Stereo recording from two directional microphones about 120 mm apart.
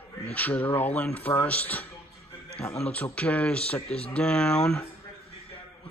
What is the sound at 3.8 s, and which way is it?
Speech, 60° left (ahead or behind).